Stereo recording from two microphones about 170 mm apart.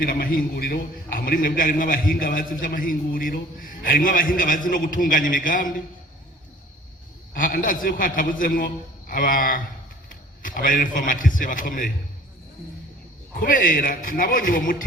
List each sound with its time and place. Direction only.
0.0 s a man's voice: 55° left (ahead or behind)
7.3 s a man's voice: 55° left (ahead or behind)
13.4 s a man's voice: 55° left (ahead or behind)